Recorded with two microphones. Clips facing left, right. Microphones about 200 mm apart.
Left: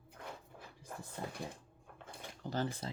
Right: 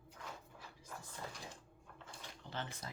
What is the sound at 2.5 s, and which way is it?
Speech, 35° left (ahead or behind).